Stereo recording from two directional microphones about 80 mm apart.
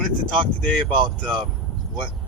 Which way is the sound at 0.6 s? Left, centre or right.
Centre.